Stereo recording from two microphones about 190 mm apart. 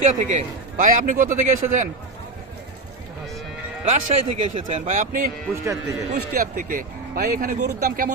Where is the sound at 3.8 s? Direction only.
40° right (ahead or behind).